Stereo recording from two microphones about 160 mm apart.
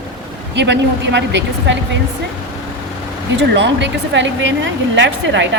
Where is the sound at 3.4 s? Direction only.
90° right.